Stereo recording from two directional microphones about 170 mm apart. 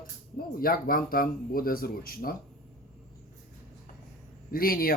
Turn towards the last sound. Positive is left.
turn(degrees=60)  # may be behind; listen again after turning